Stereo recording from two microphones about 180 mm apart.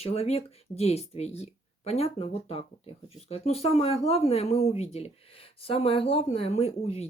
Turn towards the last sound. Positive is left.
turn(degrees=35)  # may be behind; listen again after turning